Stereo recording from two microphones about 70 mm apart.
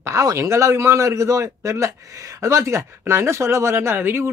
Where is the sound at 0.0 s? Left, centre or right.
Right.